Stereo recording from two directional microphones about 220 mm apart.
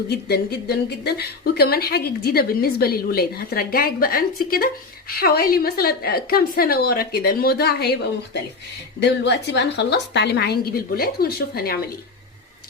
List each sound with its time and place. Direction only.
0.1 s a woman's voice: 50° left (ahead or behind)